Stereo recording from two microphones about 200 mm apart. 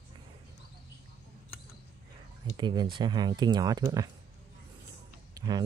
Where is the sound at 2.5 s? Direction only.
20° right (ahead or behind).